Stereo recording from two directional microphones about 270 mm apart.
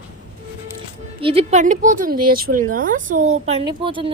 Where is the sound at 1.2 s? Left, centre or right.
Right.